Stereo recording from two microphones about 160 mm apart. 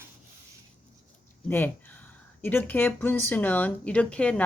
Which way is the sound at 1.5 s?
10° left (ahead or behind).